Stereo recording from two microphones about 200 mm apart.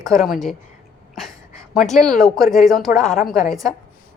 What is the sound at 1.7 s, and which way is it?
A woman's voice, centre (ahead or behind).